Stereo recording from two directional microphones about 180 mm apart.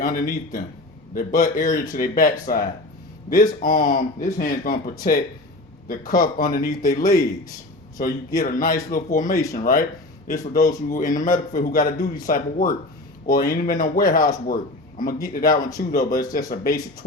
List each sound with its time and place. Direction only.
0.0 s speech: 50° left (ahead or behind)
9.3 s speech: 20° left (ahead or behind)
9.6 s speech: 50° left (ahead or behind)